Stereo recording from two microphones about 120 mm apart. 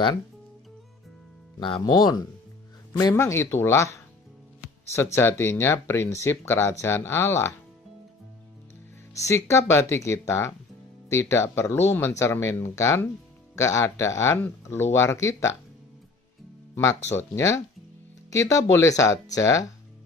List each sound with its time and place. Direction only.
1.6 s speech: 40° left (ahead or behind)
3.2 s speech: 25° left (ahead or behind)
9.1 s speech: 25° left (ahead or behind)
17.2 s speech: 25° left (ahead or behind)